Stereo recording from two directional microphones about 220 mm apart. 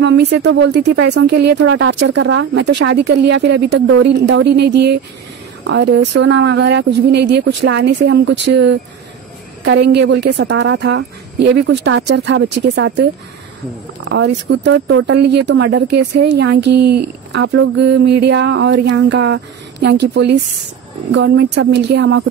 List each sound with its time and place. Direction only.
0.0 s speech: 50° right (ahead or behind)
14.0 s speech: 55° right (ahead or behind)
21.1 s speech: 60° right (ahead or behind)